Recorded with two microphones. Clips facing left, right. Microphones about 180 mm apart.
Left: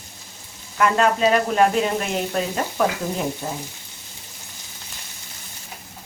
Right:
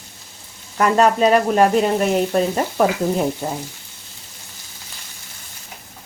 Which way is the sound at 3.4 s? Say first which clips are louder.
Right 4 dB; 35° right (ahead or behind).